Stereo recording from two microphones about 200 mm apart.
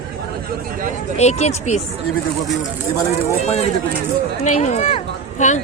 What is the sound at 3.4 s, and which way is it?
Speech, 35° left (ahead or behind).